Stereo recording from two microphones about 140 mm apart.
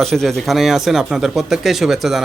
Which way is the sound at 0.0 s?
5° left (ahead or behind).